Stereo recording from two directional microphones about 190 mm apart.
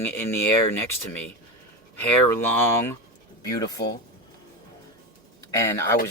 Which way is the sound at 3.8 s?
60° left (ahead or behind).